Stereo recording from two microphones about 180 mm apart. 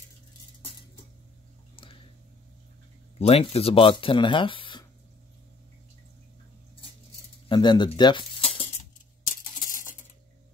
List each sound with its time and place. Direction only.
3.2 s speech: 35° left (ahead or behind)
7.4 s speech: 25° left (ahead or behind)
9.6 s a sound: 50° left (ahead or behind)